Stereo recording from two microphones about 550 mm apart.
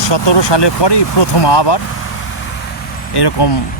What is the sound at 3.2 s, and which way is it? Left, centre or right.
Speech, left.